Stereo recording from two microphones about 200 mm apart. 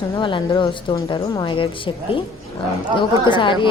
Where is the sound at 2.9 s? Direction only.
25° left (ahead or behind).